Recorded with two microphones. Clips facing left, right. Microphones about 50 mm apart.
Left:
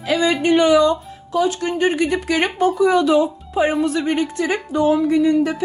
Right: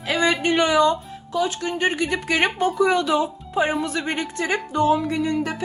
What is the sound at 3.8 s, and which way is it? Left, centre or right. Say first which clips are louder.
Speech: left 6 dB; right.